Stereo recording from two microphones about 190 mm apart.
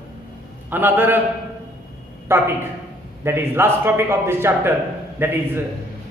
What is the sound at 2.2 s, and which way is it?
A man's voice, 10° right (ahead or behind).